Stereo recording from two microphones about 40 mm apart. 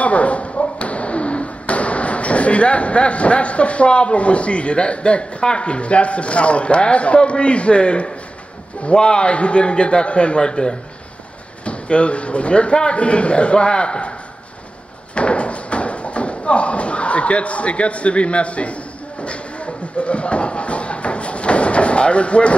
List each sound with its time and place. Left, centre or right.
0.0 s a man's voice: left
11.6 s a man's voice: left
15.1 s a sound: left